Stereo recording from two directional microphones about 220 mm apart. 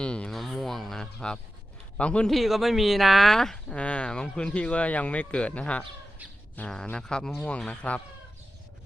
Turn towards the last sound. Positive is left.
turn(degrees=5)  # may be behind; listen again after turning